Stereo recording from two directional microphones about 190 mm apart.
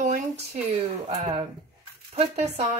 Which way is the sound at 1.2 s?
35° right (ahead or behind).